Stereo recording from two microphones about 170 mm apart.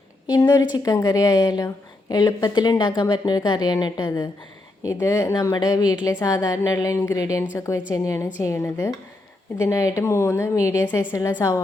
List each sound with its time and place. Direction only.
0.3 s a woman's voice: 25° left (ahead or behind)